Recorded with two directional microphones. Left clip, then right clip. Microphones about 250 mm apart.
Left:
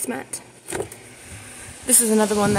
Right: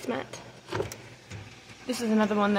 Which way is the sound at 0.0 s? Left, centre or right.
Left.